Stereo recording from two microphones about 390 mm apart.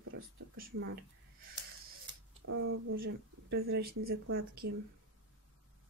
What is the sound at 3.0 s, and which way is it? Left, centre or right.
Speech, right.